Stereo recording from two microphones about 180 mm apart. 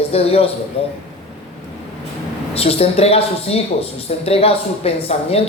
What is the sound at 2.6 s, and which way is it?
Speech, 35° left (ahead or behind).